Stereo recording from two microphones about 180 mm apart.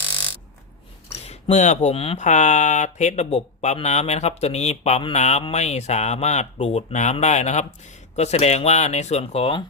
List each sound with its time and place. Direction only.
1.3 s speech: 40° left (ahead or behind)